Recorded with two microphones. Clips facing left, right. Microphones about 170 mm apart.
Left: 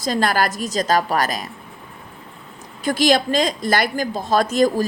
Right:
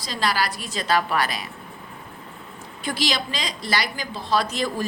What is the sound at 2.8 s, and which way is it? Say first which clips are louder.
A woman's voice: left 9 dB; 45° left (ahead or behind).